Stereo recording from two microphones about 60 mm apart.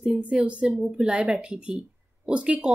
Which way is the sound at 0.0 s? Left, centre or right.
Centre.